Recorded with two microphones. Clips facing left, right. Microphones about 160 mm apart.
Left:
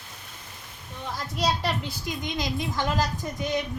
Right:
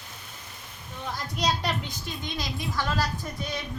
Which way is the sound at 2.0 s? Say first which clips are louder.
Left 7 dB; 20° left (ahead or behind).